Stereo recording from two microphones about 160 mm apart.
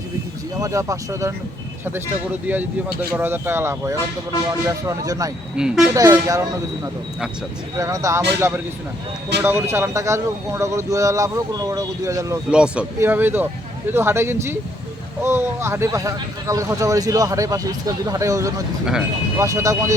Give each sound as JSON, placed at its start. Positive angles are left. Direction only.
{"t": 0.6, "sound": "speech", "side_deg": -20}
{"t": 2.5, "sound": "speech", "side_deg": -10}
{"t": 5.5, "sound": "speech", "side_deg": -5}
{"t": 5.9, "sound": "speech", "side_deg": -20}
{"t": 12.5, "sound": "speech", "side_deg": -5}